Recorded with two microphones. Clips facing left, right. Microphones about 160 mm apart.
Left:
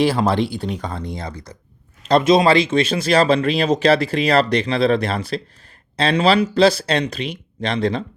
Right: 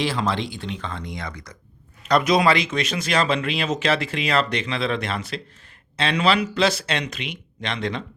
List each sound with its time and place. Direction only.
0.0 s speech: 40° left (ahead or behind)